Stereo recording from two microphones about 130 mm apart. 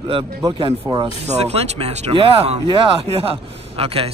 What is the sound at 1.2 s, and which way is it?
A man's voice, 55° right (ahead or behind).